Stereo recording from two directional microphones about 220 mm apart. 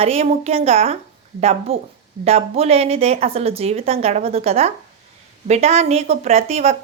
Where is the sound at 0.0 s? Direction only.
25° right (ahead or behind).